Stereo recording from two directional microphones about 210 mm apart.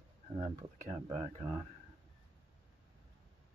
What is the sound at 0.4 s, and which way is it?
Speech, 40° right (ahead or behind).